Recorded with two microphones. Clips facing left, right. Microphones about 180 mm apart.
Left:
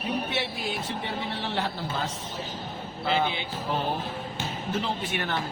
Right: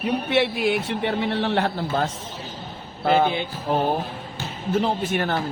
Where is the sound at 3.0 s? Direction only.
50° right (ahead or behind).